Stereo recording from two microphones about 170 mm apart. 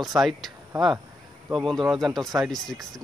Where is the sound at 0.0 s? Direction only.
Centre (ahead or behind).